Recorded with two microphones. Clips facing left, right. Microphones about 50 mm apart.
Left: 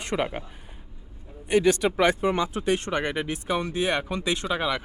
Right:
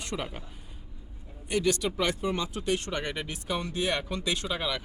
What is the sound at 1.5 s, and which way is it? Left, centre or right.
Speech, left.